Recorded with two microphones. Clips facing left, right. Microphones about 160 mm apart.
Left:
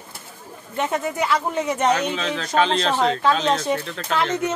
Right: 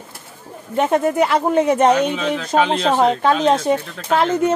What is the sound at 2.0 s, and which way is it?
Speech, 10° right (ahead or behind).